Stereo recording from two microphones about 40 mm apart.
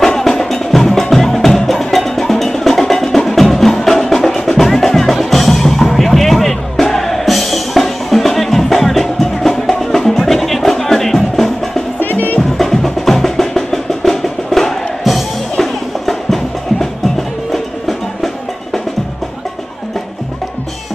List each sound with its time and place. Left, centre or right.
0.0 s music: centre
12.0 s music: left
12.4 s music: centre